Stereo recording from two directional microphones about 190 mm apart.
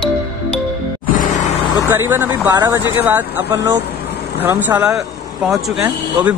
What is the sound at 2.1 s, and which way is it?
Speech, 10° right (ahead or behind).